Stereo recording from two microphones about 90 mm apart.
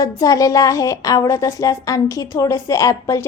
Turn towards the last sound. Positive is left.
turn(degrees=35)  # may be behind; listen again after turning